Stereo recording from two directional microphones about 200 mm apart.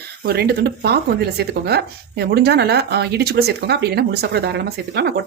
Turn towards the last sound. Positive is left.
turn(degrees=-55)  # may be behind; listen again after turning